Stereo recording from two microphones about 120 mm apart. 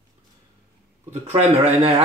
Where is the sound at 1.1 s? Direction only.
60° right (ahead or behind).